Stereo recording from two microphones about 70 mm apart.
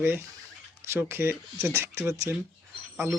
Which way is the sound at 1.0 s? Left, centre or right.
Right.